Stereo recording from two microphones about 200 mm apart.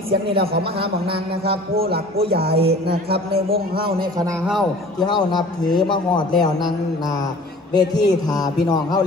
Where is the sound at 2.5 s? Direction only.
30° right (ahead or behind).